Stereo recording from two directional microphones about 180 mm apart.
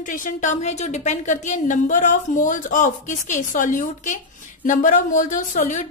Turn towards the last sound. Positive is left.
turn(degrees=45)  # may be behind; listen again after turning